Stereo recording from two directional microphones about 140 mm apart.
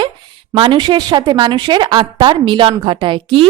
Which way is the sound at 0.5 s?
35° right (ahead or behind).